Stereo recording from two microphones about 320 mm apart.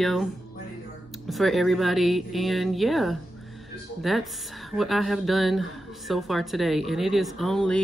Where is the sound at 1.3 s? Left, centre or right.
Centre.